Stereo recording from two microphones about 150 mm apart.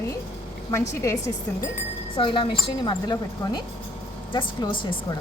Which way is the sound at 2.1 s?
35° left (ahead or behind).